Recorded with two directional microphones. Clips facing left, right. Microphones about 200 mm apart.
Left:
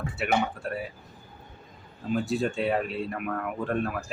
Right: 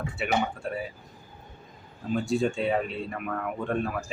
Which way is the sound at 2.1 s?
Centre (ahead or behind).